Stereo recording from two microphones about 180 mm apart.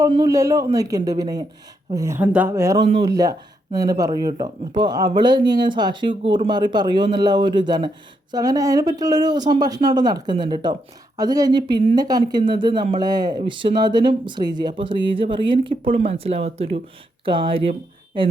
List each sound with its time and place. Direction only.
0.1 s speech: 20° right (ahead or behind)